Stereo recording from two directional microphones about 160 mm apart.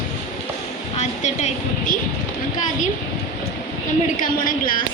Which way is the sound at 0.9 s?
45° left (ahead or behind).